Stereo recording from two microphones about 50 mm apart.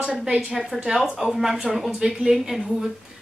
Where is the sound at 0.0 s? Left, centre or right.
Centre.